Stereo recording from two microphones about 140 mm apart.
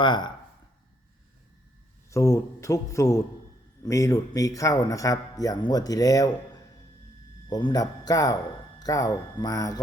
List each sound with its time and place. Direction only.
0.0 s speech: 35° left (ahead or behind)
2.0 s speech: 25° left (ahead or behind)
7.4 s speech: 30° left (ahead or behind)